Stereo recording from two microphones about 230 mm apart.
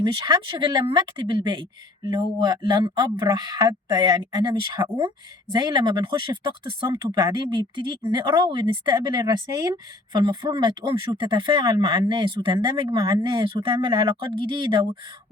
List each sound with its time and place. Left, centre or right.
0.0 s speech: centre